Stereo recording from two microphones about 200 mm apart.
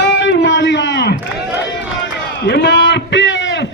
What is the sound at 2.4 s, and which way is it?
A man's voice, 55° left (ahead or behind).